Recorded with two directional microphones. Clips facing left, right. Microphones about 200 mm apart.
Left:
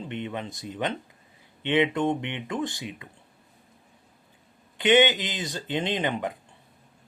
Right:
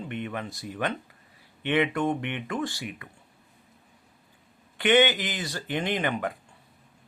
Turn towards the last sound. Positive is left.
turn(degrees=20)  # may be behind; listen again after turning